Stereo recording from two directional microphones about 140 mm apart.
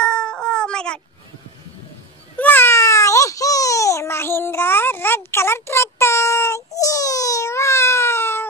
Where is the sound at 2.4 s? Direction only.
15° left (ahead or behind).